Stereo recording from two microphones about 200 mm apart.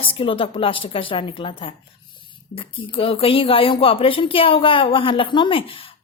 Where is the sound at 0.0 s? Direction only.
25° left (ahead or behind).